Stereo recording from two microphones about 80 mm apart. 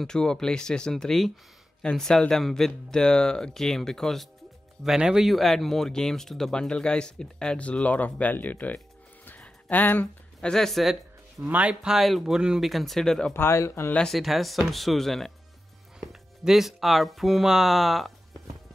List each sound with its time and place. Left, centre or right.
0.0 s speech: centre
4.8 s speech: centre; by 8.7 s left
9.2 s a sound: left
10.4 s speech: centre
11.4 s speech: centre
13.3 s speech: left
13.9 s speech: centre